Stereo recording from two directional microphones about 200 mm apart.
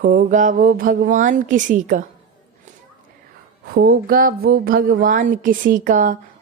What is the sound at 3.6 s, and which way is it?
Speech, 50° right (ahead or behind).